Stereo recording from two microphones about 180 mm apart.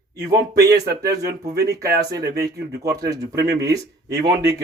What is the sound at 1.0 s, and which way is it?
Speech, 20° right (ahead or behind).